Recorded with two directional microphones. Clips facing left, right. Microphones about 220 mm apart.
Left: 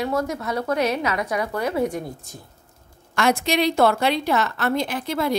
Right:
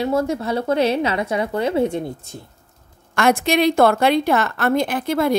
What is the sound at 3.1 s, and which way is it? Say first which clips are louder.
A woman's voice: right 3 dB; 55° right (ahead or behind).